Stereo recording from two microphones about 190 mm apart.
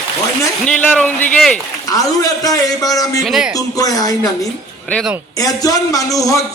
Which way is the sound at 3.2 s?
Centre (ahead or behind).